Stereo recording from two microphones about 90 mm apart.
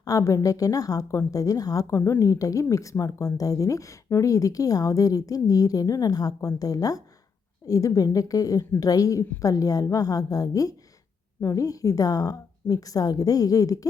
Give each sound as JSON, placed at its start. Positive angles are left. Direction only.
{"t": 0.0, "sound": "speech", "side_deg": 40}